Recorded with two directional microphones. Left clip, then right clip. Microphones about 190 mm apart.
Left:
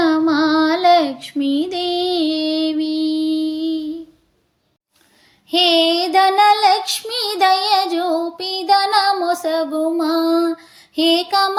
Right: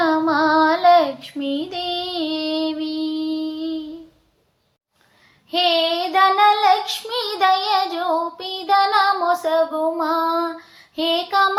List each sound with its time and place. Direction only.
0.0 s child singing: 35° left (ahead or behind)
5.5 s child singing: 45° left (ahead or behind)